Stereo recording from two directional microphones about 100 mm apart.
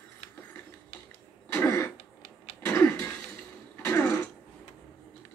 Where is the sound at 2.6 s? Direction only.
20° left (ahead or behind).